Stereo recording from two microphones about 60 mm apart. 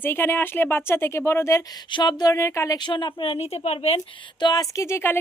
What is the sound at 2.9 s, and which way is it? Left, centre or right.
Speech, left.